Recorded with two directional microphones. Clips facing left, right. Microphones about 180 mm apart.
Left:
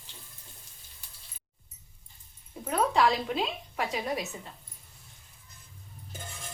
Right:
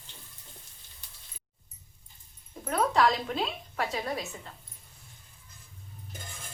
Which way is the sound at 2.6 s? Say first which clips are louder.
Even; 10° left (ahead or behind).